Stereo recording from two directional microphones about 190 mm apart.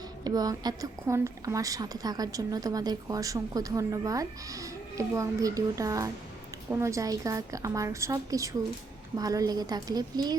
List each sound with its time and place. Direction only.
0.3 s a woman's voice: 20° right (ahead or behind)